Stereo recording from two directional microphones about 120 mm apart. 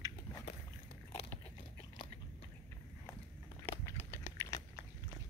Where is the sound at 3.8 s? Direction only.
20° left (ahead or behind).